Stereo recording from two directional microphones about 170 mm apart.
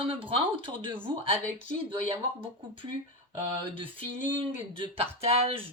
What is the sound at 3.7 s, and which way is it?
Speech, 30° right (ahead or behind).